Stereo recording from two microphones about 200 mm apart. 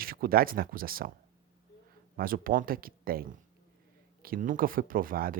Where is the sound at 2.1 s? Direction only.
45° right (ahead or behind).